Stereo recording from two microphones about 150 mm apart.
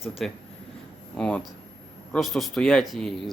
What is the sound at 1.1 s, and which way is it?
Speech, 5° left (ahead or behind).